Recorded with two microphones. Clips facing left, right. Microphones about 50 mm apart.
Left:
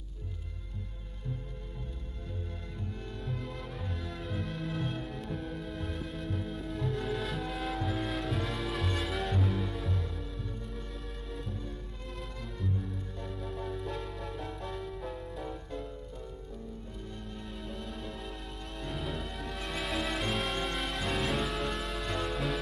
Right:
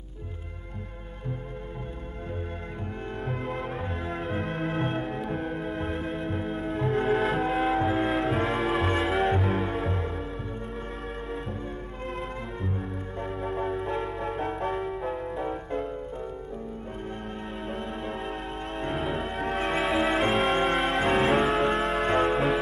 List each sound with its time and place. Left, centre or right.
3.3 s music: right
13.2 s music: right
17.6 s music: right
19.9 s music: right